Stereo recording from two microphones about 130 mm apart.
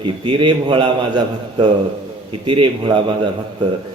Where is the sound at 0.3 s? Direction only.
40° right (ahead or behind).